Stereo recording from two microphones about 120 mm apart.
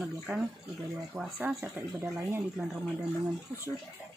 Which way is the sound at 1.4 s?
15° right (ahead or behind).